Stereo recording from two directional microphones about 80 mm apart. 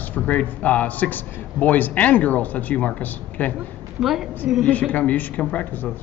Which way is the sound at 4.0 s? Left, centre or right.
Centre.